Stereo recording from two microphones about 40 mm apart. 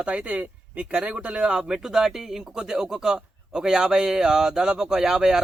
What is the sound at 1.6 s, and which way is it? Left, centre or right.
Speech, centre.